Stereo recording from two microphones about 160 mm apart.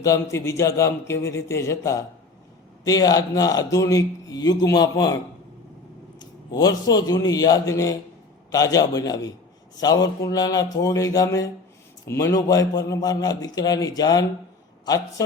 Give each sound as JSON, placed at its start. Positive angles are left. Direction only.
{"t": 0.0, "sound": "a man's voice", "side_deg": 20}
{"t": 6.1, "sound": "speech", "side_deg": 25}